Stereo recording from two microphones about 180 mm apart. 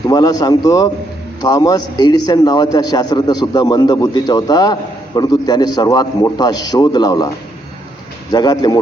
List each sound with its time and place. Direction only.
0.1 s a man's voice: 20° left (ahead or behind)